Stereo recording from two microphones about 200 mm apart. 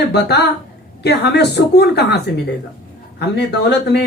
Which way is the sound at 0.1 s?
55° left (ahead or behind).